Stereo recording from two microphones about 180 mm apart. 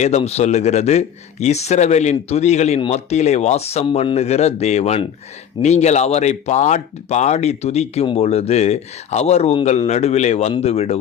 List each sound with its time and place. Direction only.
0.0 s speech: 35° left (ahead or behind)